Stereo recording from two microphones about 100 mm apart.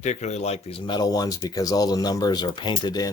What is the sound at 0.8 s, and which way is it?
Speech, 45° left (ahead or behind).